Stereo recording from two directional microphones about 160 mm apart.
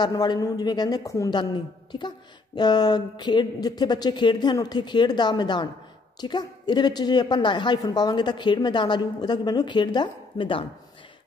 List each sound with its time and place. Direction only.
0.0 s a woman's voice: 25° left (ahead or behind)